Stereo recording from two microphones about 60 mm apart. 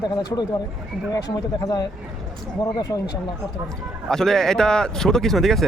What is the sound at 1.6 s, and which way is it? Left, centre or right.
Speech, left.